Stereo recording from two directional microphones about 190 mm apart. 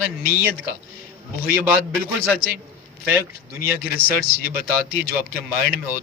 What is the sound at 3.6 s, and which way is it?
Speech, 50° left (ahead or behind).